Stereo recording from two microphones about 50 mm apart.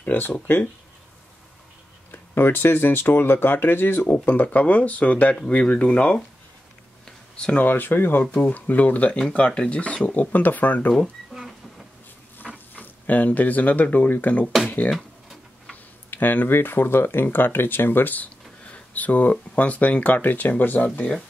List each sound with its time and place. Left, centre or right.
0.0 s speech: left
2.0 s speech: left
4.1 s speech: left
7.5 s speech: left
8.3 s speech: left
9.3 s speech: centre
12.7 s speech: left
15.0 s a sound: centre
15.7 s speech: left
18.7 s a sound: left
19.5 s speech: left